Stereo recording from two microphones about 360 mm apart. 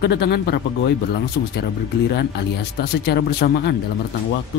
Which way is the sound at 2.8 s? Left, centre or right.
Left.